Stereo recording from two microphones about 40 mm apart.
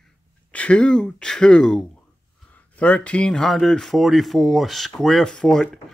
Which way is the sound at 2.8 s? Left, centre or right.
Left.